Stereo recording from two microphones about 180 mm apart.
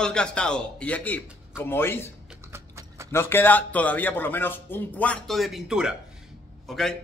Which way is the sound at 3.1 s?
15° left (ahead or behind).